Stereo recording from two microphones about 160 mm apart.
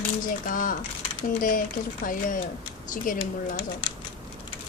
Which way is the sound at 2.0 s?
55° left (ahead or behind).